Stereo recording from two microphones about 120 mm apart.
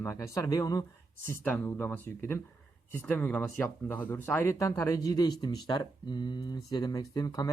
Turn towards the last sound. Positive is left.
turn(degrees=30)  # may be behind; listen again after turning